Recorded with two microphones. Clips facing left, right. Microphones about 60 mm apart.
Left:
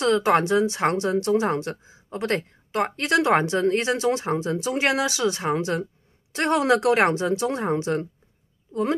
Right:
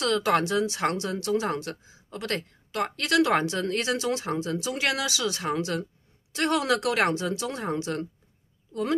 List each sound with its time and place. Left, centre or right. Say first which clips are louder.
0.0 s speech: left 4 dB; left